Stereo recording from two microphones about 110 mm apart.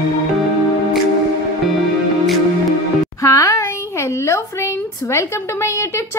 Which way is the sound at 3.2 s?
30° left (ahead or behind).